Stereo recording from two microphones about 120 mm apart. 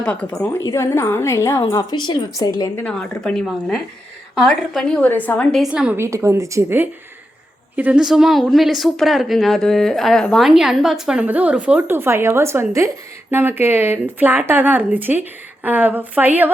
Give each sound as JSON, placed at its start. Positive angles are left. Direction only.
{"t": 0.0, "sound": "a woman's voice", "side_deg": 10}
{"t": 0.6, "sound": "a woman's voice", "side_deg": 25}
{"t": 1.7, "sound": "a woman's voice", "side_deg": 35}
{"t": 2.8, "sound": "a woman's voice", "side_deg": 10}
{"t": 5.7, "sound": "speech", "side_deg": -10}
{"t": 6.0, "sound": "speech", "side_deg": -25}
{"t": 7.8, "sound": "a woman's voice", "side_deg": -10}